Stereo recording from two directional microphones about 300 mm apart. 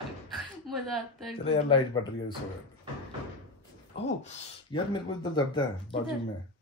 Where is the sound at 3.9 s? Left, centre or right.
Left.